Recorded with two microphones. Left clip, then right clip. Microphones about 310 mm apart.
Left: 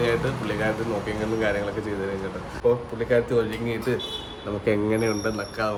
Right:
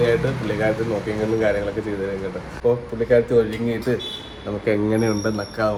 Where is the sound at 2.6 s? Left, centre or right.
Centre.